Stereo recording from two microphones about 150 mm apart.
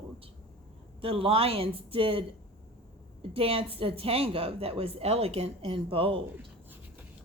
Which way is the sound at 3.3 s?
40° right (ahead or behind).